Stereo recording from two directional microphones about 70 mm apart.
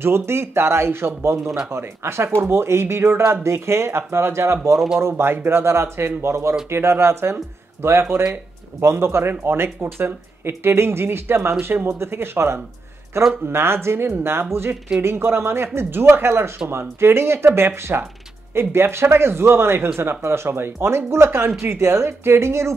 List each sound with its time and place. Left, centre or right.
0.0 s speech: right
4.7 s speech: centre
5.0 s speech: right
8.9 s speech: right